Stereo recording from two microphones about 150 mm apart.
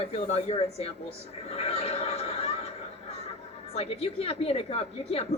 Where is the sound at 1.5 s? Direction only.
40° left (ahead or behind).